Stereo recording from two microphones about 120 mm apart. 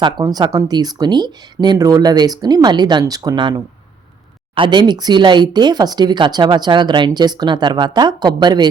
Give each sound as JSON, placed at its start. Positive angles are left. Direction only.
{"t": 0.0, "sound": "speech", "side_deg": -35}